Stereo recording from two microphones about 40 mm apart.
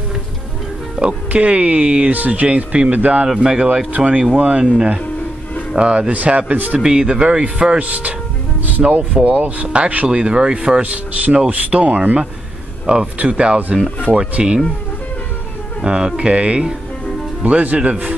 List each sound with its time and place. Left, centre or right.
1.0 s speech: right
2.4 s speech: right
6.1 s speech: right
6.8 s speech: centre
7.8 s speech: right
15.8 s speech: right